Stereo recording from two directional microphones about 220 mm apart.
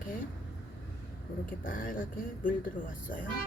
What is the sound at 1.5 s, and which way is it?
Speech, 40° left (ahead or behind).